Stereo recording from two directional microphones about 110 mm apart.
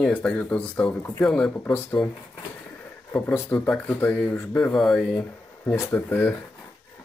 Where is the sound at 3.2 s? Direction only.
15° left (ahead or behind).